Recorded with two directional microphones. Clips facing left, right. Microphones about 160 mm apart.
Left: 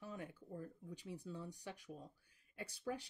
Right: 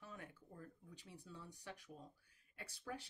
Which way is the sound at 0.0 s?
15° left (ahead or behind).